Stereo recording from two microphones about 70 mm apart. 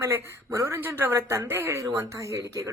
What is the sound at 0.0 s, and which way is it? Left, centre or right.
Speech, right.